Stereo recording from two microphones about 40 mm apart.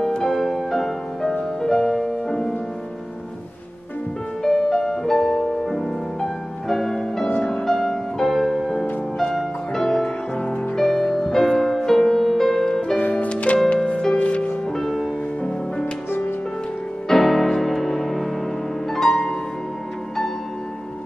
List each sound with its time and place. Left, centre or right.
0.2 s music: centre
4.4 s music: centre
13.1 s music: left
14.8 s music: centre
17.1 s music: centre